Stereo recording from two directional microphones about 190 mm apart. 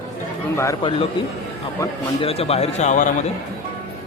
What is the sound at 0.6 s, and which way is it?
Speech, 15° left (ahead or behind).